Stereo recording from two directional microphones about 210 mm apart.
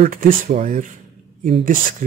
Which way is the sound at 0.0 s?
35° right (ahead or behind).